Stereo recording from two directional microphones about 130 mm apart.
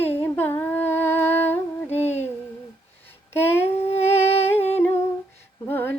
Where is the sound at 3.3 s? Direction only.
20° left (ahead or behind).